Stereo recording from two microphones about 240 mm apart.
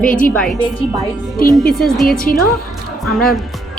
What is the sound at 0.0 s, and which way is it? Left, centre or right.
Speech, left.